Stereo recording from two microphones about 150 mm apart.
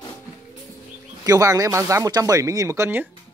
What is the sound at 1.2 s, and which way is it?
Speech, 25° right (ahead or behind).